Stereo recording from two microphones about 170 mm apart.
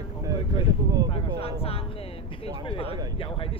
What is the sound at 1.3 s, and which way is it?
Speech, 35° left (ahead or behind).